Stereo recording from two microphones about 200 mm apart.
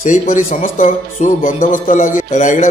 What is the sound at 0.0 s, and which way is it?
Speech, 40° left (ahead or behind).